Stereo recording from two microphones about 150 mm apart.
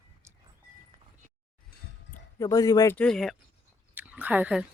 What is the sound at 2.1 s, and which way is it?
Speech, 25° left (ahead or behind).